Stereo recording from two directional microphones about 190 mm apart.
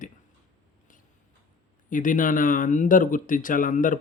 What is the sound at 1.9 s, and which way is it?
Speech, 45° left (ahead or behind).